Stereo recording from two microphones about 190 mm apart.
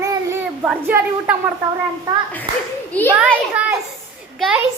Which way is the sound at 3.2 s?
10° right (ahead or behind).